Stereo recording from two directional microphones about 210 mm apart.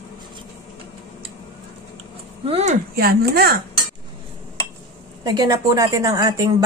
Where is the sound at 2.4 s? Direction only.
30° right (ahead or behind).